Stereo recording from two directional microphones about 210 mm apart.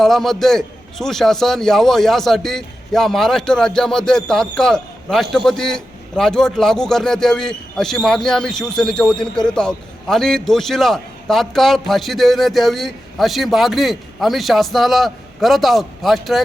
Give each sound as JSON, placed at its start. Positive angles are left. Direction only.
{"t": 0.0, "sound": "a man's voice", "side_deg": 0}